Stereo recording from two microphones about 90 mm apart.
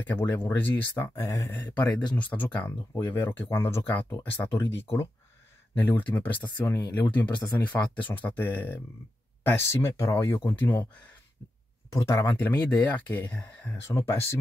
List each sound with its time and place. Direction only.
0.0 s speech: 20° left (ahead or behind)
1.5 s speech: 20° left (ahead or behind)
11.9 s speech: 35° left (ahead or behind)
12.4 s speech: 20° left (ahead or behind)
13.8 s speech: 30° left (ahead or behind)